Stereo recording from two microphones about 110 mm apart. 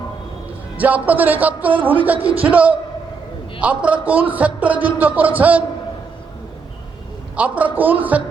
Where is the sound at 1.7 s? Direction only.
50° right (ahead or behind).